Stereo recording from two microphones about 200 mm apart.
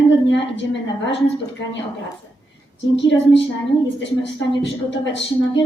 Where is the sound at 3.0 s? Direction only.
65° left (ahead or behind).